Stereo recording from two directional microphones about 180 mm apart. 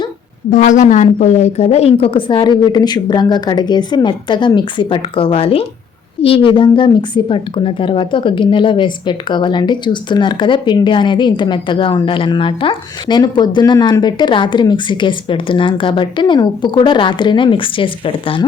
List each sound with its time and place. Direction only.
0.5 s a woman's voice: 45° left (ahead or behind); by 18.4 s 30° left (ahead or behind)